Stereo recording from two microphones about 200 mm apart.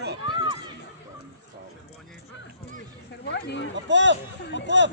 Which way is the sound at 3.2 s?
60° left (ahead or behind).